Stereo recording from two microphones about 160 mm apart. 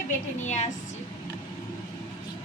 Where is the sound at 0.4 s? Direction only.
45° left (ahead or behind).